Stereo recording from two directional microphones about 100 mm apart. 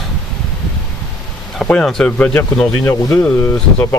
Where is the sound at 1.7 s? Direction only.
5° left (ahead or behind).